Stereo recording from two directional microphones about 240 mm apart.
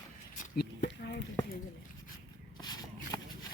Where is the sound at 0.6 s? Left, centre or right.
Left.